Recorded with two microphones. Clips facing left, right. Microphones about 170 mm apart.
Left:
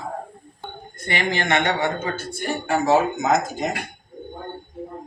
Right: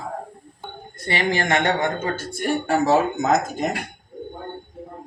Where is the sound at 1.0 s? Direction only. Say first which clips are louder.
Right 1 dB; 35° right (ahead or behind).